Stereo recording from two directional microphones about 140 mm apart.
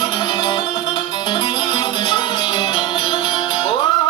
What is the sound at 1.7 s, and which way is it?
Music, 35° left (ahead or behind).